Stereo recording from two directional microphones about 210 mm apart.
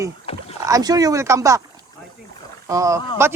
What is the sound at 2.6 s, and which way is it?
Speech, 15° right (ahead or behind).